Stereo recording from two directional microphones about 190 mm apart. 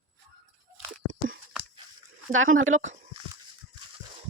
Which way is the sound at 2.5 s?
90° right.